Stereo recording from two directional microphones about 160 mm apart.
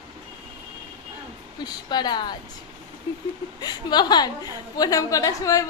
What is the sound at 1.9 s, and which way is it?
Speech, 25° left (ahead or behind).